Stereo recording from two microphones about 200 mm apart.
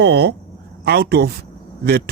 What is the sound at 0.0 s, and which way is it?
Speech, 55° right (ahead or behind).